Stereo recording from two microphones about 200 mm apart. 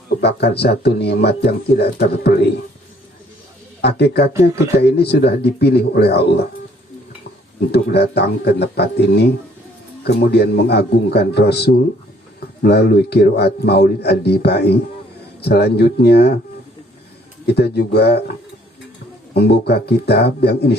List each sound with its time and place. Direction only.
0.2 s speech: 55° left (ahead or behind)
3.8 s speech: 55° left (ahead or behind)
7.7 s speech: 55° left (ahead or behind)
17.4 s speech: 55° left (ahead or behind)